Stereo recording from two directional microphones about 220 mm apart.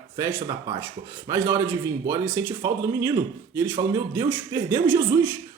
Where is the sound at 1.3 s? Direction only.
10° right (ahead or behind).